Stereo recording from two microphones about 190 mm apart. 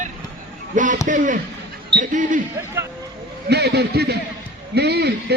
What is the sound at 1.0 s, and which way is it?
A man's voice, 40° right (ahead or behind).